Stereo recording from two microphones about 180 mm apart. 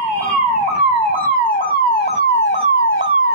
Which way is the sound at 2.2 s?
85° left.